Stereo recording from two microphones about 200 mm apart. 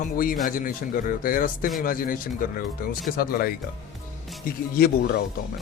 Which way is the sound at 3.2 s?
45° left (ahead or behind).